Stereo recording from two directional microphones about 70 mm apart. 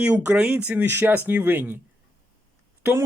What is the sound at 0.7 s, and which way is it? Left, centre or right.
Speech, right.